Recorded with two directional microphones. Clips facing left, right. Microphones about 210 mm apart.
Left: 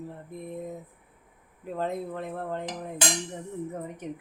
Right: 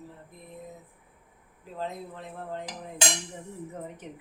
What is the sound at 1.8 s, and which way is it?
Speech, 55° left (ahead or behind).